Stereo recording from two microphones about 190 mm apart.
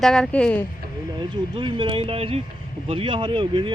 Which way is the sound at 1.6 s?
25° right (ahead or behind).